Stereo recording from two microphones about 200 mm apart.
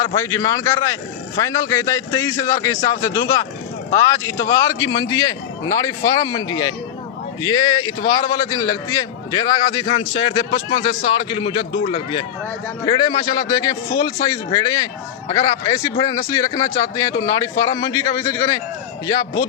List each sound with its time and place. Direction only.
0.0 s a man's voice: 15° left (ahead or behind)